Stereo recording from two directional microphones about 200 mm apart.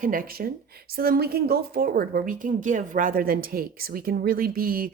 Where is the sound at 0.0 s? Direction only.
45° right (ahead or behind).